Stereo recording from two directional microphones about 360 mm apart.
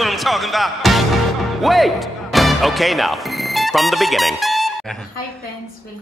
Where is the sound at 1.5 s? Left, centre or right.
Centre.